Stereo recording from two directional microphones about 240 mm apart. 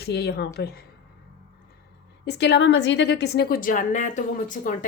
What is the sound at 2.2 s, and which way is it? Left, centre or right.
A woman's voice, left.